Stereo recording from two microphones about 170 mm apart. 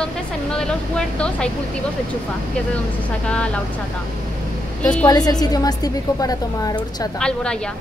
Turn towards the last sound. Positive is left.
turn(degrees=5)  # may be behind; listen again after turning